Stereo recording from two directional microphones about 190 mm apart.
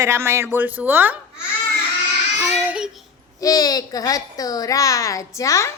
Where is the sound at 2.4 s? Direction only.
5° right (ahead or behind).